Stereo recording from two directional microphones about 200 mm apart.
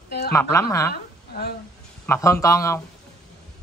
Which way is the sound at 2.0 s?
15° left (ahead or behind).